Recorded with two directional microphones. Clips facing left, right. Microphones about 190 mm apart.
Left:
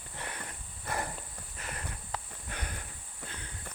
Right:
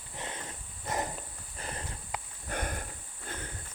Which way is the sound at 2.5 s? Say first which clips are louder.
Right 7 dB; 50° right (ahead or behind).